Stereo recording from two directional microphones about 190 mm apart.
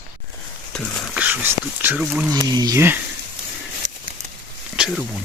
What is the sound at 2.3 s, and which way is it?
Speech, 20° right (ahead or behind).